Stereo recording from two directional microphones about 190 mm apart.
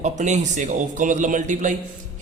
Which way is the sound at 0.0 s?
40° right (ahead or behind).